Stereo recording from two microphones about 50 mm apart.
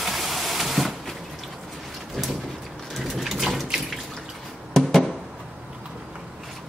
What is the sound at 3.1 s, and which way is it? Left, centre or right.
Water, centre.